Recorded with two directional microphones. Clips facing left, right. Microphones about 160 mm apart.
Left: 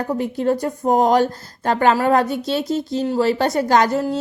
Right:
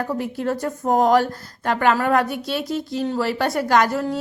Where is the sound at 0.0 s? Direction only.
20° left (ahead or behind).